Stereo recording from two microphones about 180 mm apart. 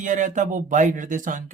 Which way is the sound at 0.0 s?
45° right (ahead or behind).